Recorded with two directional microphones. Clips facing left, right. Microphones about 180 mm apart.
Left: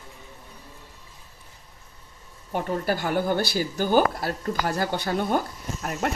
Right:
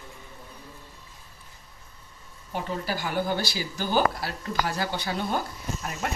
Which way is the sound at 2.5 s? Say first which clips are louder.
Left 5 dB; 55° left (ahead or behind).